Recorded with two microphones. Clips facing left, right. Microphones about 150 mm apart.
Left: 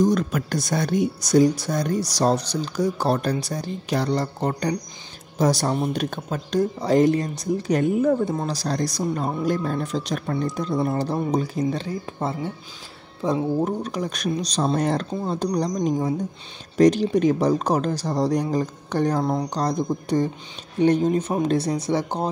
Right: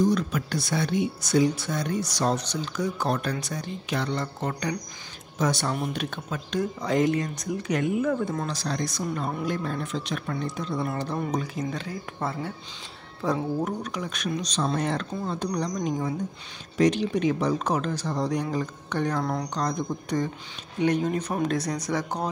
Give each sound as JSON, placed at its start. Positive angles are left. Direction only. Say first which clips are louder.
{"t": 0.0, "sound": "speech", "louder": "left 3 dB", "side_deg": 45}
{"t": 16.7, "sound": "speech", "louder": "left 5 dB", "side_deg": 40}